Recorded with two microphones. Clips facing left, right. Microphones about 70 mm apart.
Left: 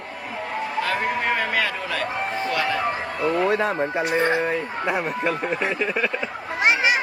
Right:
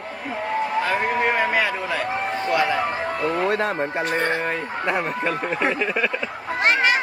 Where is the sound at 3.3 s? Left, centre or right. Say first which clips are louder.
Left 2 dB; centre.